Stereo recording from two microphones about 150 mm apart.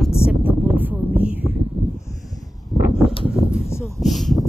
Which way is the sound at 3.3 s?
5° right (ahead or behind).